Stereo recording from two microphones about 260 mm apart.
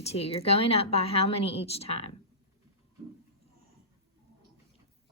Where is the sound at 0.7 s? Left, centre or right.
Left.